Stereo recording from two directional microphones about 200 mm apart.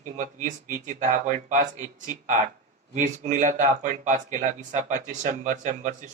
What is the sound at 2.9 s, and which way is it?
A man's voice, 35° right (ahead or behind).